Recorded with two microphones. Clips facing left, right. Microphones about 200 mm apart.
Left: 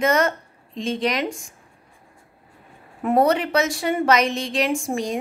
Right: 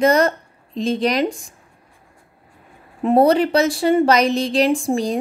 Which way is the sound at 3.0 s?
30° right (ahead or behind).